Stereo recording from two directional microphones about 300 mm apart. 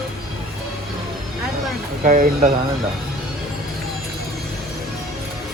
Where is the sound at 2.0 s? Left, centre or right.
Right.